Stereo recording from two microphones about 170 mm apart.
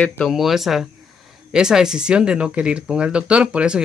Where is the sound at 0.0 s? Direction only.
10° left (ahead or behind).